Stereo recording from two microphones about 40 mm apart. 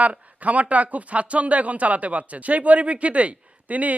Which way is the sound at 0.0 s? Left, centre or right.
Right.